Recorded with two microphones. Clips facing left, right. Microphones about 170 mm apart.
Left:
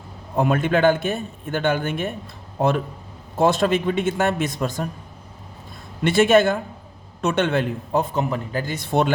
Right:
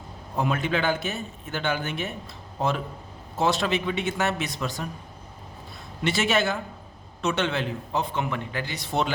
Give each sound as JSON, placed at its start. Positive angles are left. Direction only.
{"t": 0.3, "sound": "a man's voice", "side_deg": 50}
{"t": 6.0, "sound": "a man's voice", "side_deg": 55}